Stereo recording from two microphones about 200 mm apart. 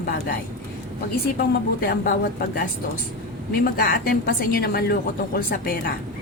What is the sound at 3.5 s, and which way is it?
A woman's voice, 45° left (ahead or behind).